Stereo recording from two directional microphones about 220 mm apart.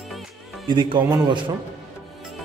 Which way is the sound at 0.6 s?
20° right (ahead or behind).